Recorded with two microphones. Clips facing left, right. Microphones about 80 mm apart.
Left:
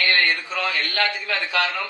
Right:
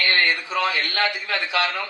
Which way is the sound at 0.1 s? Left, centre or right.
Right.